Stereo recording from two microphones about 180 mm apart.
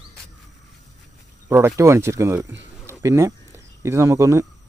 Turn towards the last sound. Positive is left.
turn(degrees=-15)  # may be behind; listen again after turning